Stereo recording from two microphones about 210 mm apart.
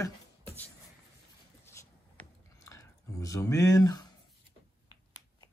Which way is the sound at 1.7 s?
15° left (ahead or behind).